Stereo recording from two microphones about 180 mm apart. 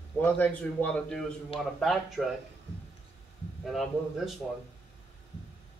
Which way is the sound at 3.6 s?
Centre (ahead or behind).